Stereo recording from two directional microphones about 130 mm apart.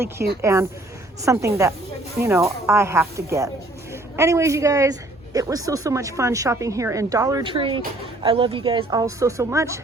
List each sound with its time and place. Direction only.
0.0 s a woman's voice: 20° right (ahead or behind)
7.4 s a woman's voice: 40° right (ahead or behind); by 9.8 s 20° right (ahead or behind)